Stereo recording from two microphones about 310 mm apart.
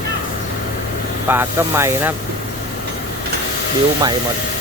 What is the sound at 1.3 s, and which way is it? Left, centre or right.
Speech, centre.